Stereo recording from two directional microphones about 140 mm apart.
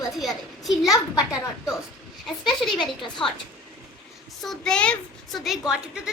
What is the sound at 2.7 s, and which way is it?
Speech, 35° left (ahead or behind).